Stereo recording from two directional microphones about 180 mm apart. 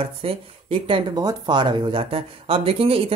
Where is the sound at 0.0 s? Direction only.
30° right (ahead or behind).